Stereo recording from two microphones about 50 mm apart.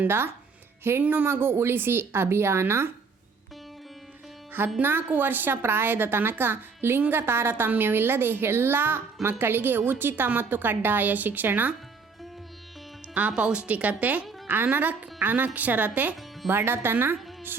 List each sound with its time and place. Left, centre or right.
1.0 s a woman's voice: right
4.8 s a woman's voice: right
13.1 s a woman's voice: right
16.5 s a woman's voice: right